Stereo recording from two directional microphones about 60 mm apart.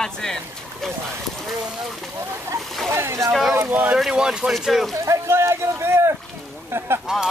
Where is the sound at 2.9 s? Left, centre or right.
Right.